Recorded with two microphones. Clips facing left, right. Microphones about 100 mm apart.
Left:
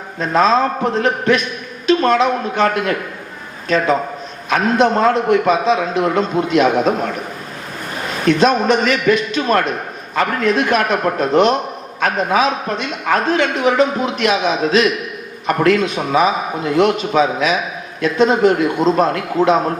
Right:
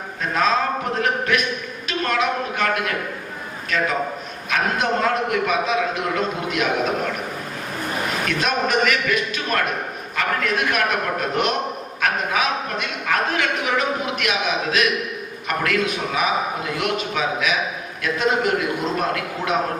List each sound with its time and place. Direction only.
0.2 s a man's voice: 30° left (ahead or behind)
8.3 s a man's voice: 30° left (ahead or behind)